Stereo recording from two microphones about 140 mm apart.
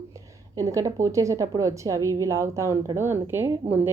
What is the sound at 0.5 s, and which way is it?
A woman's voice, 25° right (ahead or behind).